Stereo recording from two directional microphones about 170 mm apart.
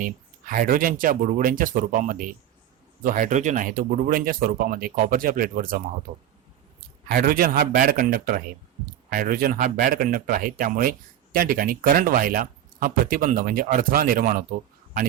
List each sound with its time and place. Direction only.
0.0 s speech: 55° right (ahead or behind)